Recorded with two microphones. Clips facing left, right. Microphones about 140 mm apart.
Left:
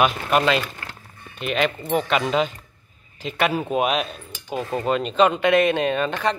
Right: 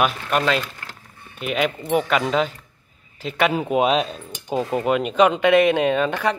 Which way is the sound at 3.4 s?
15° right (ahead or behind).